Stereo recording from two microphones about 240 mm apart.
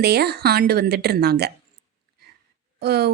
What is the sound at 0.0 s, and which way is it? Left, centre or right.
A woman's voice, right.